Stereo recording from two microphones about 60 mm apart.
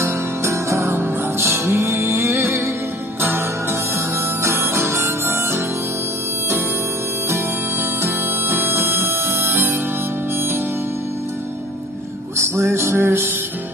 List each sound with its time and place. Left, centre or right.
0.0 s music: right
8.0 s music: right
9.4 s music: right
12.4 s music: right